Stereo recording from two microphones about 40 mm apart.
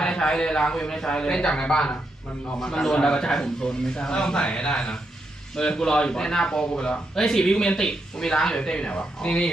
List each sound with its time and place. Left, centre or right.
0.0 s a man's voice: centre
2.9 s a man's voice: centre